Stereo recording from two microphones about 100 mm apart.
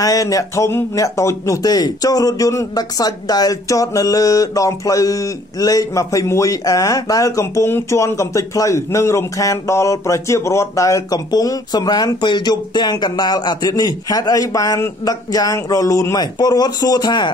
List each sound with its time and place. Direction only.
0.0 s speech: 35° left (ahead or behind)
16.3 s speech: 45° left (ahead or behind)